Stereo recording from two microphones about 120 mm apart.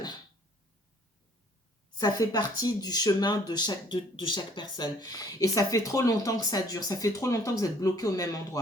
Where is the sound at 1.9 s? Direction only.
35° left (ahead or behind).